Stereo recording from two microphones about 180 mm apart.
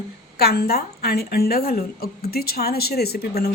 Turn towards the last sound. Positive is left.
turn(degrees=60)  # may be behind; listen again after turning